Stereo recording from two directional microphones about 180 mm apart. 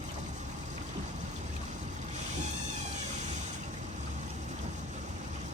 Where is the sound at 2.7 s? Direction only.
40° right (ahead or behind).